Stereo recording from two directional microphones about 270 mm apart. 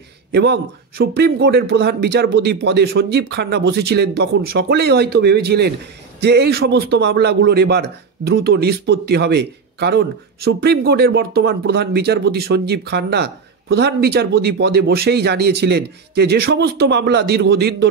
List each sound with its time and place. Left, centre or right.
0.3 s a man's voice: right